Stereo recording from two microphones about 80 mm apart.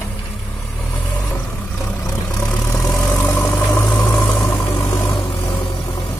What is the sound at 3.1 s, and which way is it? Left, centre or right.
Vehicle, left.